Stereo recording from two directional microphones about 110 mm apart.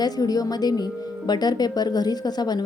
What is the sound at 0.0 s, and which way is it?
A woman's voice, 35° left (ahead or behind).